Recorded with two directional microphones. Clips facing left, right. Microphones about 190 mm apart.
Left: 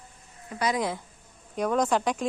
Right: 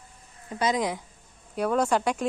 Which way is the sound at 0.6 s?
20° right (ahead or behind).